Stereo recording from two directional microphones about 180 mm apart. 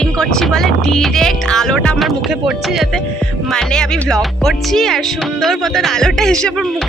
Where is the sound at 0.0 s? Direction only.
5° left (ahead or behind).